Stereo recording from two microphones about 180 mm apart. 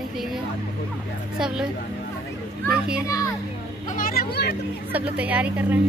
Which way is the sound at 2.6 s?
5° right (ahead or behind).